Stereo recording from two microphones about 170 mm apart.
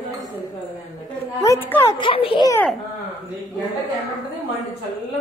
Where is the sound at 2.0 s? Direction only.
30° left (ahead or behind).